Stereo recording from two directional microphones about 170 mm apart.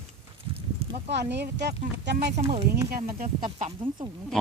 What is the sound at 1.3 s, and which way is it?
Speech, 80° right.